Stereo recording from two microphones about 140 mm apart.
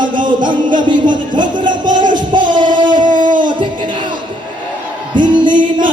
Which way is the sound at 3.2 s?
70° right (ahead or behind).